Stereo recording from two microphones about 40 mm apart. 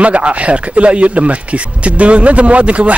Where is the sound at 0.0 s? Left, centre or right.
Right.